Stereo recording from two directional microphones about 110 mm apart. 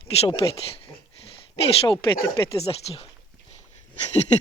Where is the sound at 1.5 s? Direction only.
55° left (ahead or behind).